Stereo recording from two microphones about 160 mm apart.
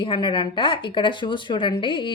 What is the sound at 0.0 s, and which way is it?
Speech, 30° left (ahead or behind).